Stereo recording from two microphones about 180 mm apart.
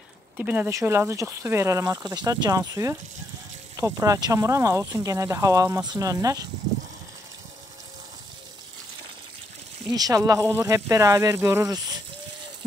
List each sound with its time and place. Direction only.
0.4 s speech: 10° right (ahead or behind)
9.9 s speech: 20° right (ahead or behind)